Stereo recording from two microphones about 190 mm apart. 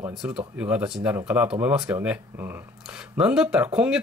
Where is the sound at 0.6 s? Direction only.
5° right (ahead or behind).